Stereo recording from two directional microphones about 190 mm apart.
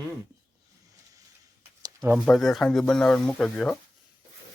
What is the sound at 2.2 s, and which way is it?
Speech, centre (ahead or behind).